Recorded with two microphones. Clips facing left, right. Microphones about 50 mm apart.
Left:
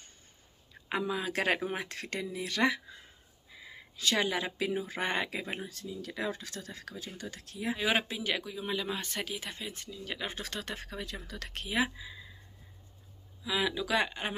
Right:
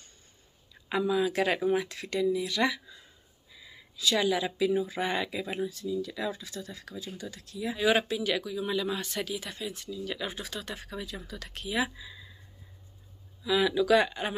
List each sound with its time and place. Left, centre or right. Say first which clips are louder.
0.8 s speech: right 6 dB; left
3.5 s a sound: even; left
4.6 s speech: right 5 dB; left
5.7 s speech: right 8 dB; left
7.7 s speech: right 5 dB; left
10.7 s speech: right 1 dB; left
11.2 s speech: right 2 dB; left
11.7 s speech: right 1 dB; left
13.4 s speech: right 6 dB; centre